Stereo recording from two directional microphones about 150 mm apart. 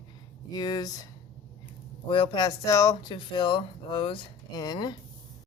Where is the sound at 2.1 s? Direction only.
30° left (ahead or behind).